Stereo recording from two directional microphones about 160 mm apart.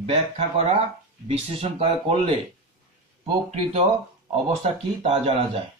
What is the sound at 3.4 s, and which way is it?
Speech, 45° right (ahead or behind).